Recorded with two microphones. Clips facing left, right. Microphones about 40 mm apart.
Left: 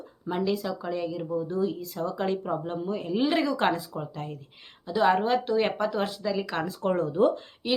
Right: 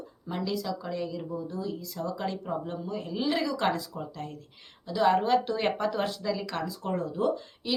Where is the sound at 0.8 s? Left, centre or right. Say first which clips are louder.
Left 3 dB; centre.